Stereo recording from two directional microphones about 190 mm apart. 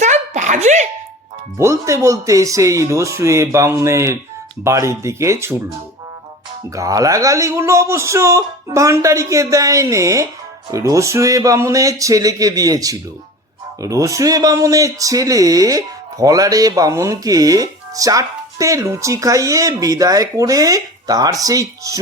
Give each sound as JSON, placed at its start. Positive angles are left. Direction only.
{"t": 0.0, "sound": "a sound", "side_deg": -40}
{"t": 1.5, "sound": "speech", "side_deg": -15}
{"t": 6.7, "sound": "speech", "side_deg": -20}